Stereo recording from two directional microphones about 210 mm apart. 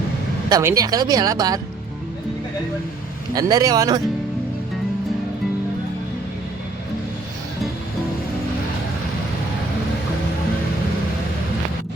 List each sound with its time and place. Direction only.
0.5 s speech: 15° right (ahead or behind)
3.3 s speech: 15° right (ahead or behind)